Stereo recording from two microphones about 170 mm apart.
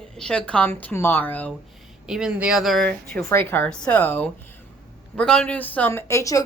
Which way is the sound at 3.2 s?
15° left (ahead or behind).